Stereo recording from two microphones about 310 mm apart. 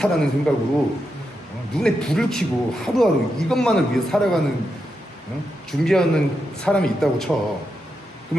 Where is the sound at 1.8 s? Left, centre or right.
Centre.